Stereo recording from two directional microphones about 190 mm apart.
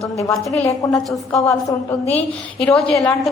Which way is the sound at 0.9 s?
5° left (ahead or behind).